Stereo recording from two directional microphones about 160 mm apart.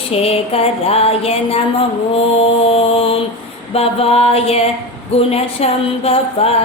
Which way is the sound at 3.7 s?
40° left (ahead or behind).